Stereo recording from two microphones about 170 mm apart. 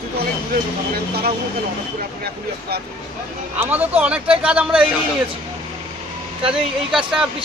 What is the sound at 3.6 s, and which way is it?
Speech, 10° right (ahead or behind).